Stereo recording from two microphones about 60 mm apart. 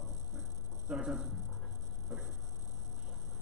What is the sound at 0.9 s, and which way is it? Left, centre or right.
Speech, centre.